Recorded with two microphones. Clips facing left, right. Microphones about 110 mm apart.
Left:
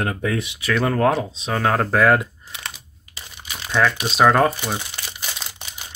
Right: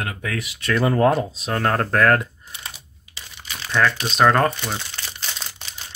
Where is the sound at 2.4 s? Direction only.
90° left.